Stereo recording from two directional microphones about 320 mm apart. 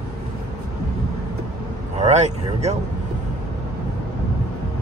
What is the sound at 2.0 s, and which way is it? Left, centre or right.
Vehicle, right.